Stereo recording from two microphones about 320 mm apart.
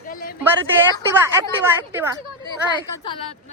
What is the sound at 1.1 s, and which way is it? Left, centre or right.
Speech, centre.